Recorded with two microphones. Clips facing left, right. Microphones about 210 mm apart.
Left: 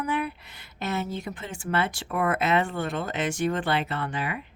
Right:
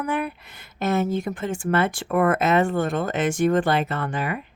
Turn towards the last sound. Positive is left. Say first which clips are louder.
# right 4 dB
turn(degrees=-45)  # may be behind; listen again after turning